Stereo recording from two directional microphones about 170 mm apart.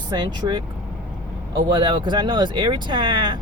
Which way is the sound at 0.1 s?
25° right (ahead or behind).